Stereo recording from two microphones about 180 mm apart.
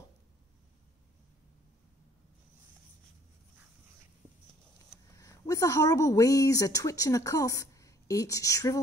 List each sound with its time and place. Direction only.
5.1 s a woman's voice: 20° left (ahead or behind)